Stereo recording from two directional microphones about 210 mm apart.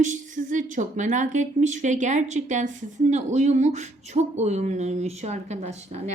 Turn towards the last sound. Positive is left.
turn(degrees=-30)  # may be behind; listen again after turning